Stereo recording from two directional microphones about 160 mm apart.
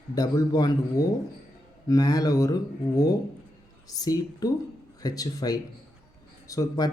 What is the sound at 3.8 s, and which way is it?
Speech, 25° left (ahead or behind).